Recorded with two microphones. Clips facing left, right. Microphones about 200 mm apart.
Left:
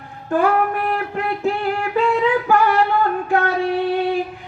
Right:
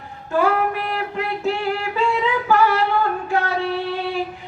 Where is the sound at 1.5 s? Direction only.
55° left (ahead or behind).